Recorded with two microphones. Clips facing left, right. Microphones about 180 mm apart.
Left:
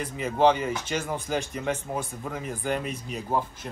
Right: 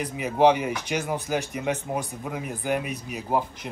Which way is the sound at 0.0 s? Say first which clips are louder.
Right 2 dB; 15° right (ahead or behind).